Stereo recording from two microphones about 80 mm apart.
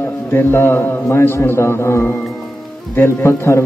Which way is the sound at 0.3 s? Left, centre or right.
Left.